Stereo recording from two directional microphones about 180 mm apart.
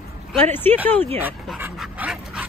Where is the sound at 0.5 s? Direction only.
10° left (ahead or behind).